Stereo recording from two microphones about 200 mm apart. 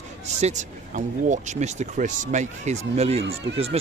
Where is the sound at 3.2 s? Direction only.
65° right (ahead or behind).